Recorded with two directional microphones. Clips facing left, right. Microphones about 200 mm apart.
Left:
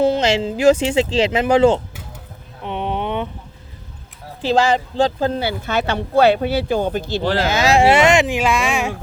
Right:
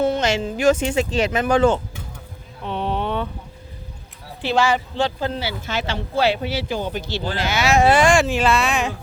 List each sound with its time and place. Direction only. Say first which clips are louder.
0.0 s speech: left 3 dB; 25° left (ahead or behind)
2.6 s a sound: left 1 dB; 15° left (ahead or behind)
4.4 s a woman's voice: left 3 dB; 35° left (ahead or behind); by 7.4 s 60° left (ahead or behind)
7.7 s speech: left 1 dB; 25° left (ahead or behind); by 8.9 s 10° left (ahead or behind)